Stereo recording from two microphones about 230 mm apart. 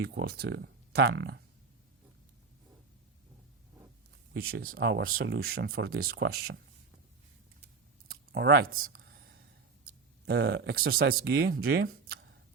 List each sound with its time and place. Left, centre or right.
0.0 s speech: right
4.4 s speech: right
8.0 s a sound: right
9.8 s speech: right